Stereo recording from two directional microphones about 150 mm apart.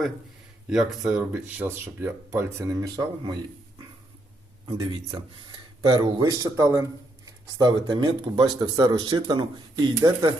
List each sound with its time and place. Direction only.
0.7 s speech: 5° right (ahead or behind); by 3.3 s 25° right (ahead or behind)
4.7 s speech: 35° right (ahead or behind)